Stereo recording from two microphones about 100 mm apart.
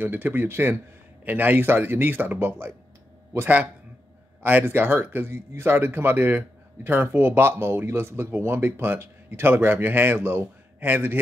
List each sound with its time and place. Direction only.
0.0 s a man's voice: 20° right (ahead or behind)